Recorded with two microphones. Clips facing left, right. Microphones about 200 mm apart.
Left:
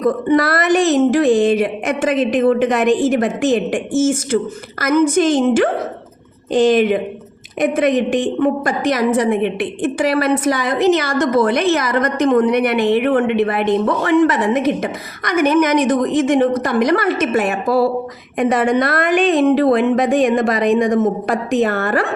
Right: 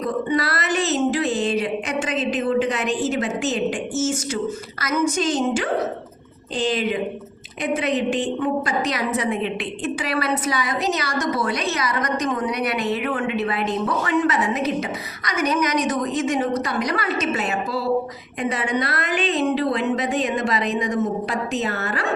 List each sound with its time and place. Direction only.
0.0 s speech: 50° left (ahead or behind)
5.1 s a woman's voice: 55° left (ahead or behind)
8.4 s a woman's voice: 50° left (ahead or behind)